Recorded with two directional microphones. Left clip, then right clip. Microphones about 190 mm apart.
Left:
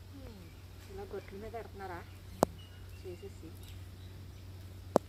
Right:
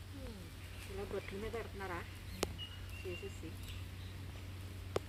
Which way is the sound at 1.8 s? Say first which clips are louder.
Even; 10° left (ahead or behind).